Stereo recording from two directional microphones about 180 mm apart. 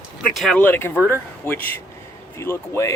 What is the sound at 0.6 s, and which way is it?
Speech, 10° left (ahead or behind).